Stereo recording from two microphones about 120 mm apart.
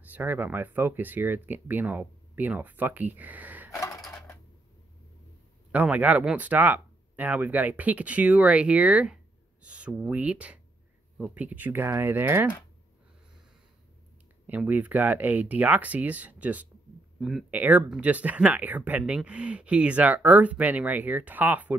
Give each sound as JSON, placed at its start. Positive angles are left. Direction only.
{"t": 0.1, "sound": "speech", "side_deg": -15}
{"t": 5.7, "sound": "speech", "side_deg": -15}
{"t": 14.4, "sound": "speech", "side_deg": -15}
{"t": 17.5, "sound": "speech", "side_deg": -15}